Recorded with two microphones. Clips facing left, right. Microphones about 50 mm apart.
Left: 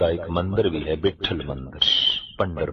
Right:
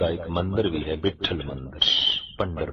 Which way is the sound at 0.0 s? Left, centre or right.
Centre.